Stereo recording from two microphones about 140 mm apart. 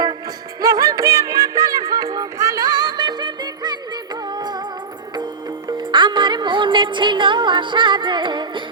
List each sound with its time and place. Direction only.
0.6 s music: 25° right (ahead or behind)